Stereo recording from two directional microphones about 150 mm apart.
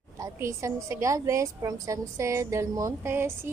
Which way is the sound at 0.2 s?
20° right (ahead or behind).